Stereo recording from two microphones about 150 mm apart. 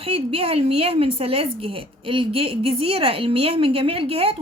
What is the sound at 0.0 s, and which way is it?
A woman's voice, 40° right (ahead or behind).